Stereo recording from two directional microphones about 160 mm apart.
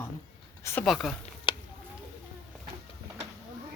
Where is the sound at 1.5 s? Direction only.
30° left (ahead or behind).